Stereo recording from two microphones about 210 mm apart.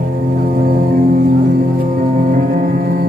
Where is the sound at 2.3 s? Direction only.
40° right (ahead or behind).